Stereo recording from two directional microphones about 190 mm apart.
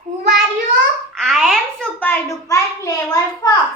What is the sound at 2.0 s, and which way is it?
A child's voice, 15° left (ahead or behind).